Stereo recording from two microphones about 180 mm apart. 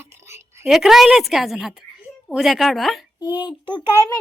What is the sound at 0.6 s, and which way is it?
A child's voice, centre (ahead or behind).